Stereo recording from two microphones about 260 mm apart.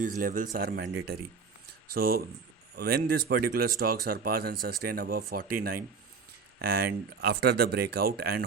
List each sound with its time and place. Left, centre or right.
0.0 s speech: right